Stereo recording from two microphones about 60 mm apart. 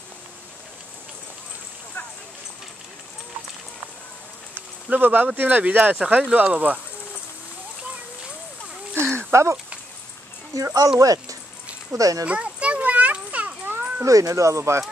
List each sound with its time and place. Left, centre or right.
4.8 s speech: right
8.9 s a sound: right
9.3 s speech: right
10.5 s speech: right
12.3 s children playing: centre
13.7 s a sound: right
14.0 s speech: right